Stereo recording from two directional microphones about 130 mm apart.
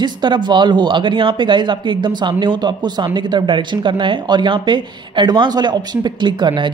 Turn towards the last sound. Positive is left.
turn(degrees=-35)  # may be behind; listen again after turning